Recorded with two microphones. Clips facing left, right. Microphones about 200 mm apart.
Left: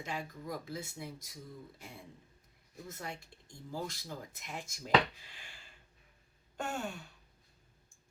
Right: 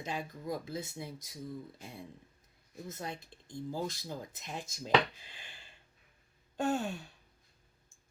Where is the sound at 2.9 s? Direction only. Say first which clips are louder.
Right 3 dB; 20° right (ahead or behind).